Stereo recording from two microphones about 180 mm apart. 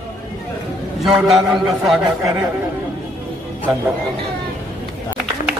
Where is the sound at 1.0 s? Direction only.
5° right (ahead or behind).